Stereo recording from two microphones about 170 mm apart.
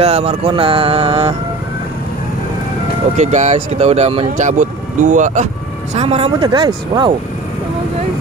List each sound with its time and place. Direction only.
0.0 s mantra: 35° right (ahead or behind)
3.2 s mantra: 45° right (ahead or behind)
4.4 s speech: 50° right (ahead or behind)
5.9 s mantra: 35° right (ahead or behind)